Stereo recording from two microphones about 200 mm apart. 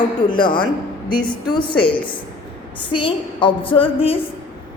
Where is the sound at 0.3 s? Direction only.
25° left (ahead or behind).